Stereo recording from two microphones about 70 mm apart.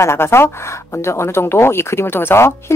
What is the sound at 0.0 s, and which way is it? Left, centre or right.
Speech, left.